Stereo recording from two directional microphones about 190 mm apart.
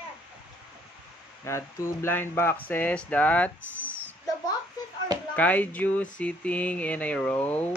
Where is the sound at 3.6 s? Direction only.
75° left (ahead or behind).